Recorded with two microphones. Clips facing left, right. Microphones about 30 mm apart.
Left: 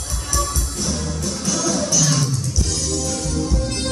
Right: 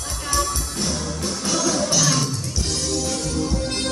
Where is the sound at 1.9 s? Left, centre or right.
Right.